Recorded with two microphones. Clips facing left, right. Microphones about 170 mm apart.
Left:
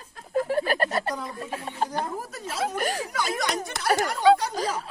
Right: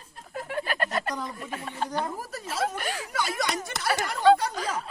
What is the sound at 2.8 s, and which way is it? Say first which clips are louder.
Speech: left 5 dB; 45° left (ahead or behind).